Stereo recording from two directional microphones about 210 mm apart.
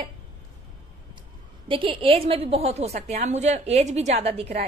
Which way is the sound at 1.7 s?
25° right (ahead or behind).